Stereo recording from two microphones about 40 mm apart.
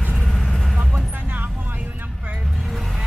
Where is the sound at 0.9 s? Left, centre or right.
Right.